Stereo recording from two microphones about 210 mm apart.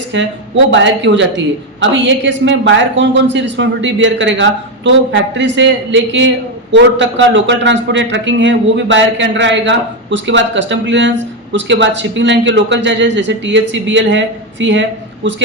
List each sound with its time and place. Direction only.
0.1 s a man's voice: 60° right (ahead or behind)